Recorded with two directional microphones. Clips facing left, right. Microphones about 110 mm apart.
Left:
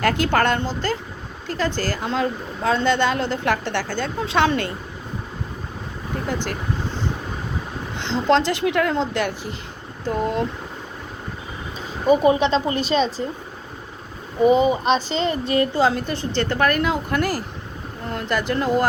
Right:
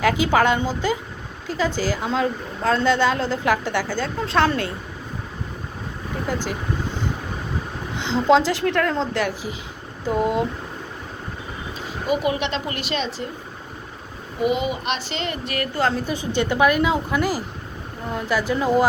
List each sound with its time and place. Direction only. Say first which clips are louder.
0.0 s a woman's voice: right 1 dB; 5° right (ahead or behind)
6.2 s a woman's voice: right 1 dB; 5° right (ahead or behind)
7.9 s a woman's voice: right 2 dB; 5° right (ahead or behind)
12.0 s speech: left 6 dB; 30° left (ahead or behind)
14.4 s a woman's voice: left 6 dB; 35° left (ahead or behind)
15.9 s a woman's voice: even; centre (ahead or behind)
16.1 s a woman's voice: right 1 dB; 10° right (ahead or behind)